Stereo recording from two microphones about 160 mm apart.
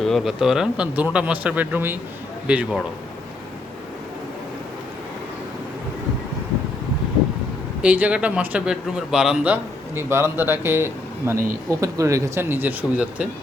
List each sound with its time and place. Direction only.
0.0 s speech: centre (ahead or behind)
7.8 s speech: 10° right (ahead or behind)